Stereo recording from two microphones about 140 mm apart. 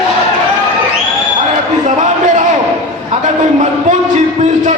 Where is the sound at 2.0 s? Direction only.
60° right (ahead or behind).